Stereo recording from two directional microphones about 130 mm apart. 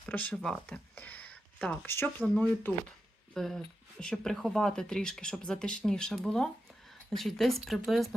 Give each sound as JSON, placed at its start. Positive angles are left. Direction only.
{"t": 0.0, "sound": "speech", "side_deg": 10}
{"t": 0.7, "sound": "a sound", "side_deg": 10}
{"t": 1.9, "sound": "speech", "side_deg": 15}